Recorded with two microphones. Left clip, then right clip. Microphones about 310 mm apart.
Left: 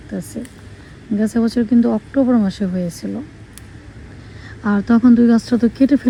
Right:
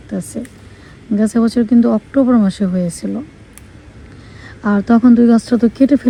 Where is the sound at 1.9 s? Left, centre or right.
Right.